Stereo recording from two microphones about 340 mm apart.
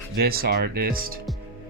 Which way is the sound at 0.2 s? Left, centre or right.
Right.